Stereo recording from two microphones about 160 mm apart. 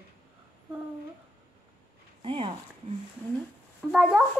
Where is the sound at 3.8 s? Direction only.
5° right (ahead or behind).